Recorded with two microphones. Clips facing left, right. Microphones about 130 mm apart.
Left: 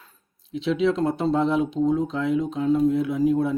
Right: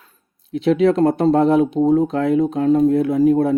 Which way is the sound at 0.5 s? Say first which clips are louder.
Right 7 dB; 55° right (ahead or behind).